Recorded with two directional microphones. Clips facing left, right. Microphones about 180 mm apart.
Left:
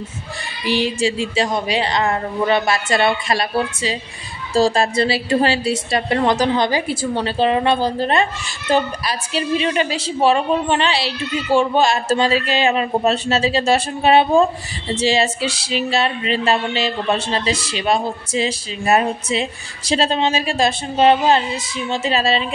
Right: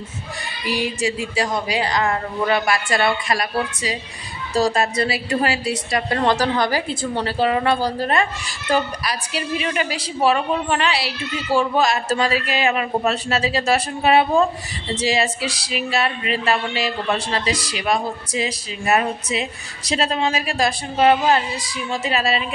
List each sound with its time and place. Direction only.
0.7 s speech: 25° left (ahead or behind)
6.9 s a woman's voice: 10° left (ahead or behind)
7.2 s speech: 25° left (ahead or behind)